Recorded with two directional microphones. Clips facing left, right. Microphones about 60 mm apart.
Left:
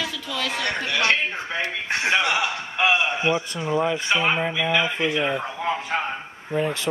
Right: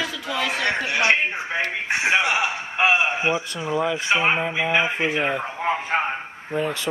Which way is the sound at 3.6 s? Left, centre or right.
Centre.